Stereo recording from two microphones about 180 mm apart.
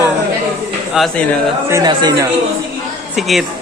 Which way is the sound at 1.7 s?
25° right (ahead or behind).